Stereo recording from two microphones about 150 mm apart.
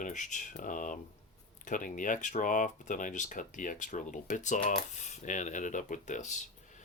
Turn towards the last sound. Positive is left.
turn(degrees=55)  # may be behind; listen again after turning